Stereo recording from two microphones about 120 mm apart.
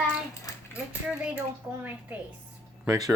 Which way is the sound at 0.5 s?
30° left (ahead or behind).